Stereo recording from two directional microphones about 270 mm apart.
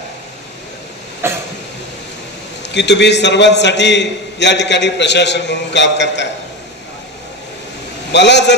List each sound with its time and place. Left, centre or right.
1.2 s a sound: centre
2.7 s a man's voice: left
8.1 s a man's voice: left